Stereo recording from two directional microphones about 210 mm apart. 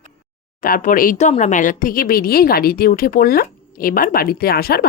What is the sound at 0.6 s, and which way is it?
Speech, 40° left (ahead or behind).